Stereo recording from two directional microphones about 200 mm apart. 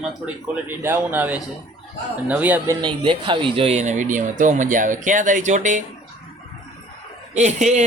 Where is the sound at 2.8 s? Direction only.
25° right (ahead or behind).